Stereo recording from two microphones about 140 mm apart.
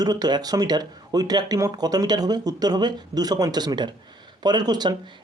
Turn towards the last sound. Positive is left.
turn(degrees=-30)  # may be behind; listen again after turning